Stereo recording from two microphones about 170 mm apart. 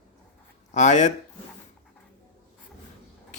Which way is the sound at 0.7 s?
45° left (ahead or behind).